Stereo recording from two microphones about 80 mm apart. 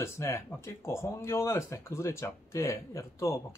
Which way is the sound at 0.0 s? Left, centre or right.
Left.